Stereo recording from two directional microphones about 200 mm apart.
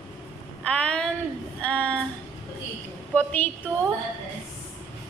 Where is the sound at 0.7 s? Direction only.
5° left (ahead or behind).